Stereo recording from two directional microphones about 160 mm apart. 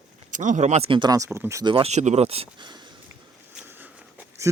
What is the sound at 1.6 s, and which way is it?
Speech, 35° right (ahead or behind).